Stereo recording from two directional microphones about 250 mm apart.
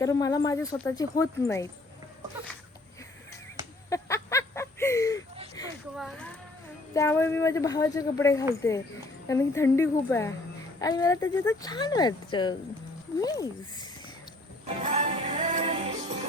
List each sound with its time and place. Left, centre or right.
0.0 s speech: centre
3.8 s a sound: centre
6.0 s speech: centre
14.8 s music: right